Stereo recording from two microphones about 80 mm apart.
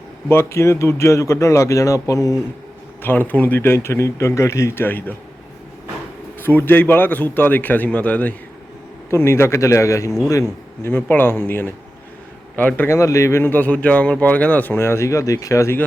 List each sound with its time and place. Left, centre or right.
0.3 s speech: left
3.0 s a man's voice: left
6.4 s a man's voice: left
9.0 s speech: left
10.9 s a man's voice: left
13.0 s speech: left
13.4 s a man's voice: left